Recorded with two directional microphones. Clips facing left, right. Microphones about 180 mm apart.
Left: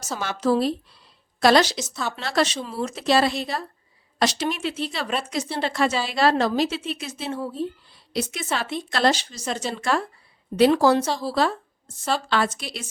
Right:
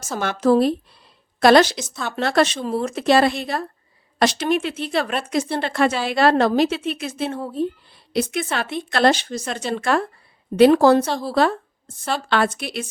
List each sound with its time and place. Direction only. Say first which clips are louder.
0.0 s a woman's voice: right 4 dB; 55° right (ahead or behind)
1.8 s speech: even; centre (ahead or behind)
2.1 s speech: right 6 dB; 55° right (ahead or behind)